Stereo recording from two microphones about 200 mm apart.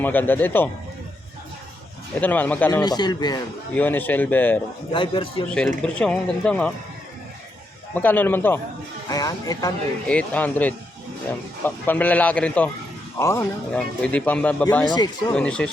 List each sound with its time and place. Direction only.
0.0 s speech: 10° left (ahead or behind)
2.2 s speech: 10° left (ahead or behind)
2.8 s speech: 20° left (ahead or behind)
3.8 s speech: 10° left (ahead or behind)
4.9 s speech: 25° left (ahead or behind)
5.5 s speech: 5° left (ahead or behind)
7.9 s speech: 10° left (ahead or behind)
10.1 s speech: 5° left (ahead or behind)
14.8 s speech: 20° left (ahead or behind)
15.3 s speech: 5° left (ahead or behind)